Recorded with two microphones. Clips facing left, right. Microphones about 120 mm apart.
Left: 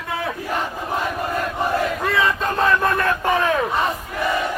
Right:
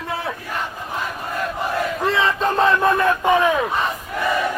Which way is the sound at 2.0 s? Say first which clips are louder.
Right 1 dB; 25° right (ahead or behind).